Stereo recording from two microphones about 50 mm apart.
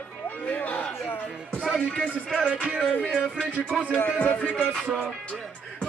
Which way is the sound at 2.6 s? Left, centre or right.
Centre.